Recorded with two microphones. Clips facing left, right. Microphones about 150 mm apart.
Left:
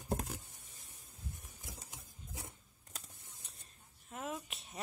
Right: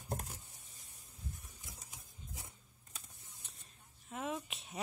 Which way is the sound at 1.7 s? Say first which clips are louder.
Left 6 dB; 70° left (ahead or behind).